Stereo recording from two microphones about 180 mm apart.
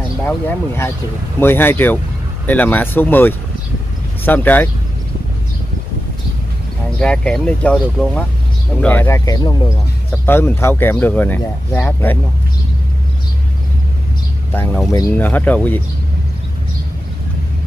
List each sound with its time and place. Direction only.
0.2 s speech: 10° left (ahead or behind)
7.0 s speech: 5° left (ahead or behind); by 9.8 s 25° left (ahead or behind)
10.2 s speech: 10° left (ahead or behind)
14.9 s speech: 15° left (ahead or behind)